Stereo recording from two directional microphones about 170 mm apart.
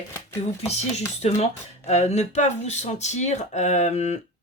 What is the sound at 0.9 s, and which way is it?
Speech, 40° left (ahead or behind).